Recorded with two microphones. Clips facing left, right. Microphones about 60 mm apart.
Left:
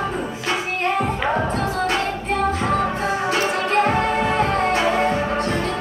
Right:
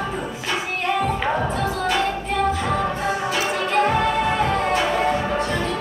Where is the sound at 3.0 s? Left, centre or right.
Left.